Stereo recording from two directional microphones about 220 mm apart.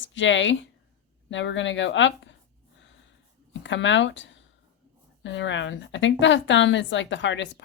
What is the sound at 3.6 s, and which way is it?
Speech, 55° left (ahead or behind).